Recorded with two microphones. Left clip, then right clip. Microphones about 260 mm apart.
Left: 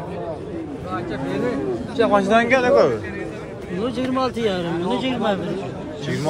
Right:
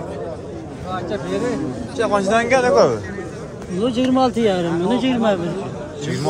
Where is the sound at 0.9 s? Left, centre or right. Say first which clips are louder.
Right 3 dB; right.